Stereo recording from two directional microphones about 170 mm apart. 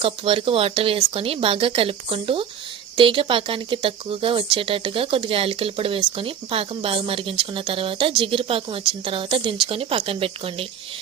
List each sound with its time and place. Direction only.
0.0 s speech: 35° right (ahead or behind)